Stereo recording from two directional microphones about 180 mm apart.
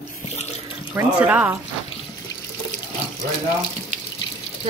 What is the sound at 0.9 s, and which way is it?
Speech, 5° right (ahead or behind).